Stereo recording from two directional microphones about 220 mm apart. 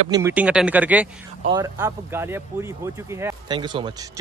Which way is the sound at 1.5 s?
15° right (ahead or behind).